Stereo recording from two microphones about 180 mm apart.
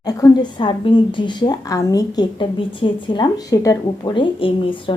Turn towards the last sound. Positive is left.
turn(degrees=30)  # may be behind; listen again after turning